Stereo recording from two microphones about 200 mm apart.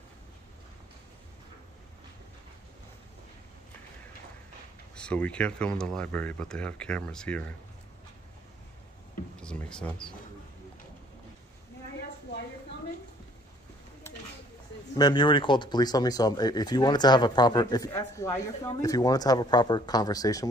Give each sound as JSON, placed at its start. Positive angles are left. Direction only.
{"t": 4.9, "sound": "speech", "side_deg": 5}
{"t": 9.4, "sound": "speech", "side_deg": 5}
{"t": 15.0, "sound": "speech", "side_deg": 20}